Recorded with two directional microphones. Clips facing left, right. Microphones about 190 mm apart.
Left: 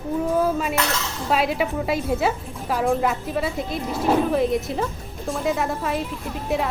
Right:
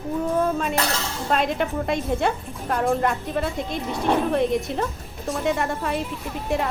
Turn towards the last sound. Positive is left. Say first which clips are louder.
# left 1 dB
turn(degrees=0)  # may be behind; listen again after turning